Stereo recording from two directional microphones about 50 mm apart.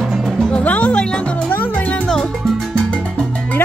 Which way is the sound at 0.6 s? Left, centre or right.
Left.